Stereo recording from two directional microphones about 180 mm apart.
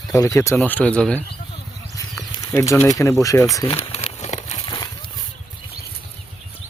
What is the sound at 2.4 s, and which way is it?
Speech, 15° left (ahead or behind).